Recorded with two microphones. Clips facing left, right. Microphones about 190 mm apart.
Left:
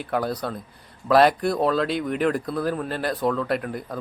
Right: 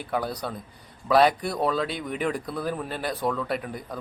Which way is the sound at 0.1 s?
Centre (ahead or behind).